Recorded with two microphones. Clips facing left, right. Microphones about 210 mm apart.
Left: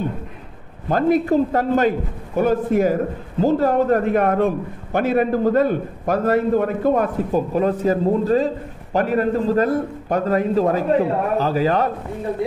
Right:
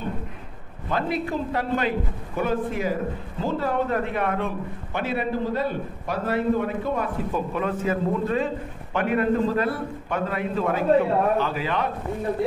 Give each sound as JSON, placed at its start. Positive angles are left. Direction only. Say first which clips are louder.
{"t": 0.8, "sound": "a man's voice", "louder": "left 9 dB", "side_deg": 45}